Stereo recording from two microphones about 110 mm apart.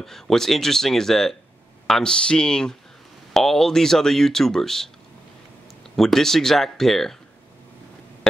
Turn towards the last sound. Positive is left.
turn(degrees=5)  # may be behind; listen again after turning